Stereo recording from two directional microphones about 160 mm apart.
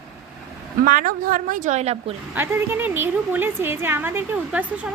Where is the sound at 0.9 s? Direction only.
60° right (ahead or behind); by 2.1 s 40° right (ahead or behind).